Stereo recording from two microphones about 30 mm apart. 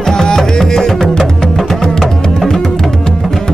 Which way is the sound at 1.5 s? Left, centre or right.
Centre.